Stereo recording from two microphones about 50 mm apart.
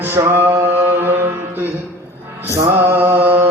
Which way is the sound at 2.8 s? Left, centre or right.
Right.